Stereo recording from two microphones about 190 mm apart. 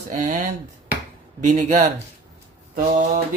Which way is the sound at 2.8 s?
45° right (ahead or behind).